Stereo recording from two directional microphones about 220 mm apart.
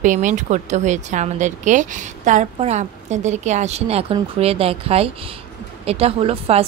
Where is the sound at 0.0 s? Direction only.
35° right (ahead or behind).